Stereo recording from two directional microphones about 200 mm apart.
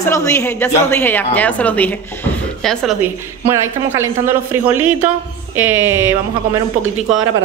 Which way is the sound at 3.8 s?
10° right (ahead or behind).